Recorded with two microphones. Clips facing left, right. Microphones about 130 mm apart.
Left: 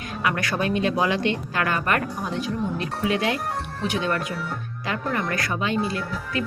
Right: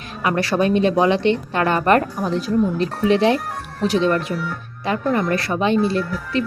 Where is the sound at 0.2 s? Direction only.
30° right (ahead or behind).